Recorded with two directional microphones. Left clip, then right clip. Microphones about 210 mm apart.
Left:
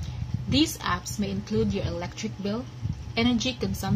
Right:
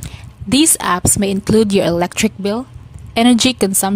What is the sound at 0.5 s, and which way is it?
A woman's voice, 50° right (ahead or behind).